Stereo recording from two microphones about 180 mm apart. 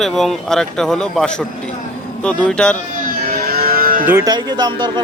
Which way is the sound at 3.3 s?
55° right (ahead or behind).